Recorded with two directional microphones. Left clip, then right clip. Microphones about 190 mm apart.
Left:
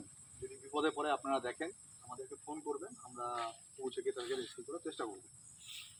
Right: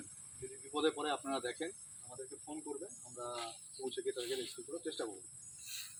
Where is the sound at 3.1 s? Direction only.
Centre (ahead or behind).